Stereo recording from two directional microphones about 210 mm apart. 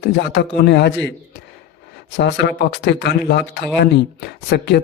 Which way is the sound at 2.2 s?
55° left (ahead or behind).